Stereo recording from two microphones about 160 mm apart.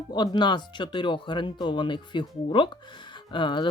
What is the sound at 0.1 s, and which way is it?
Speech, 25° left (ahead or behind).